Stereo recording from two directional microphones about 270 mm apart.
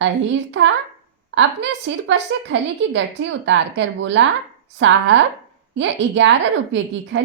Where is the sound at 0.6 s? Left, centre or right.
Right.